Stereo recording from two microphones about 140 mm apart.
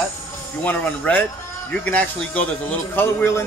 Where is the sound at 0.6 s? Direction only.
10° left (ahead or behind).